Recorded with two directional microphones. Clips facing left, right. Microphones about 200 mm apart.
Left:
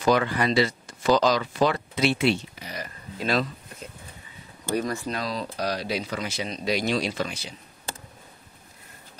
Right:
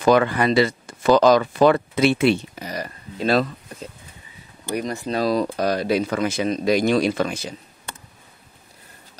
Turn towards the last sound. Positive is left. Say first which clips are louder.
# right 7 dB
turn(degrees=-50)  # may be behind; listen again after turning